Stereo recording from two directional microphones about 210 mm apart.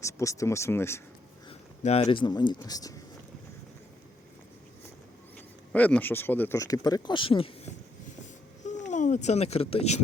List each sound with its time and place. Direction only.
0.0 s speech: 15° left (ahead or behind)
1.5 s speech: 30° left (ahead or behind)
5.7 s speech: 5° left (ahead or behind); by 10.0 s 30° left (ahead or behind)